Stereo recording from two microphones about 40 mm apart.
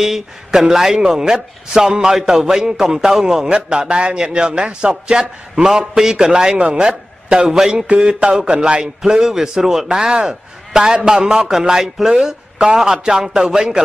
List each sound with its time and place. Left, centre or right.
0.0 s a man's voice: centre; by 8.8 s right
9.0 s a man's voice: centre
9.8 s a man's voice: right
12.5 s a man's voice: right